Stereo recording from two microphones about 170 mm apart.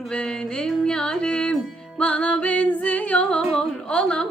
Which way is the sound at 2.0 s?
5° left (ahead or behind).